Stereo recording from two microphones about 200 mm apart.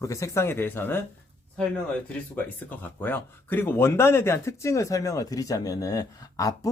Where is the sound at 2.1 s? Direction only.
10° left (ahead or behind).